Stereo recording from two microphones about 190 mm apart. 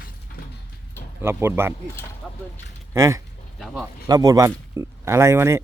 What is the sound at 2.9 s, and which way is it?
Speech, 15° right (ahead or behind).